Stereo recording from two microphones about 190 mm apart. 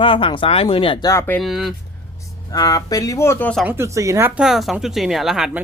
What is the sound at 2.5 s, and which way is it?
Speech, 20° left (ahead or behind).